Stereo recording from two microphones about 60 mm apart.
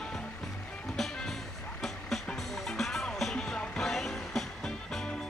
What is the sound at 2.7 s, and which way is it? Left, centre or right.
Music, centre.